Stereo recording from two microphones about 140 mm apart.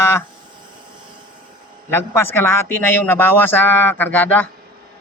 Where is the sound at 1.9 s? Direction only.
15° left (ahead or behind).